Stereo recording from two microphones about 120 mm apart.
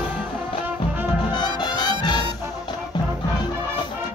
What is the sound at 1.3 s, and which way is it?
Music, 35° left (ahead or behind).